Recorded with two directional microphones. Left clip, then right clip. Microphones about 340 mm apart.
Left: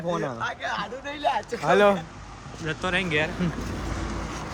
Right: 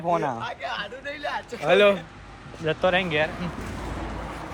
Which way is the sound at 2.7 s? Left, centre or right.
Centre.